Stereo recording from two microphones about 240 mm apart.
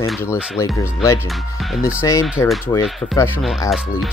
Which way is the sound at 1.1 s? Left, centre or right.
Centre.